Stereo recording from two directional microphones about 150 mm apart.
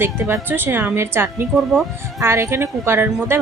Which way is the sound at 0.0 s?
15° right (ahead or behind).